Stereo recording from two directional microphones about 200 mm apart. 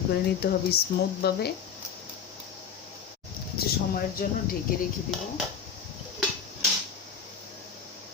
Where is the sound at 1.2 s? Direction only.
50° left (ahead or behind).